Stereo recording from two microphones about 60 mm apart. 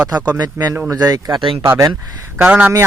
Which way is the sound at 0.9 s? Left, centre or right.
Right.